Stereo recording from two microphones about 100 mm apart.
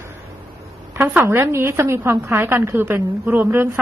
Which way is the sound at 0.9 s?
20° right (ahead or behind).